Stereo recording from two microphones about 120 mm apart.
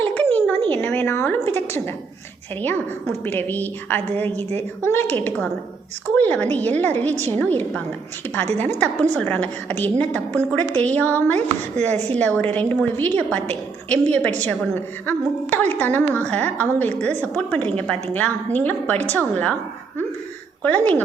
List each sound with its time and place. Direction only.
0.0 s a sound: 15° left (ahead or behind)
2.6 s a woman's voice: 15° left (ahead or behind)
9.1 s a woman's voice: 15° left (ahead or behind)
20.6 s speech: 10° left (ahead or behind)